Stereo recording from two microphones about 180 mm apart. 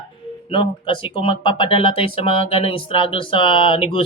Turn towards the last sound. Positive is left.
turn(degrees=30)  # may be behind; listen again after turning